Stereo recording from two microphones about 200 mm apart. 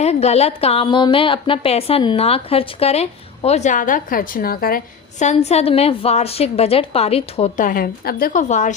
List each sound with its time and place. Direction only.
0.0 s a woman's voice: 30° left (ahead or behind)
5.2 s a woman's voice: 35° left (ahead or behind)